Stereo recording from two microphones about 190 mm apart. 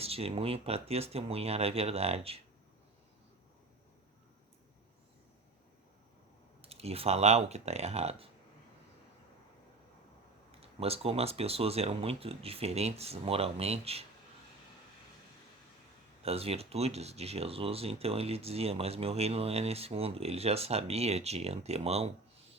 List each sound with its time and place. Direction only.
0.0 s speech: 30° right (ahead or behind)
6.6 s speech: 30° right (ahead or behind)
10.6 s speech: 30° right (ahead or behind)
16.2 s speech: 30° right (ahead or behind)